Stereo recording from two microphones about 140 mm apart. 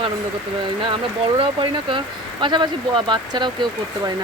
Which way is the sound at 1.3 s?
35° right (ahead or behind).